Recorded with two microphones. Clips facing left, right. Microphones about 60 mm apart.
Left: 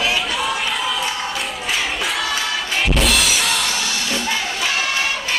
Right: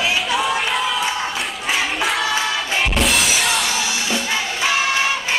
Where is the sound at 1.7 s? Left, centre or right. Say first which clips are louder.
Right 3 dB; centre.